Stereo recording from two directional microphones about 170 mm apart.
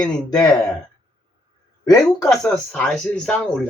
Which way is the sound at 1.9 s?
20° left (ahead or behind).